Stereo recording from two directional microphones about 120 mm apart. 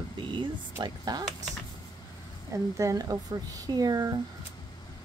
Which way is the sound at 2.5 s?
25° right (ahead or behind).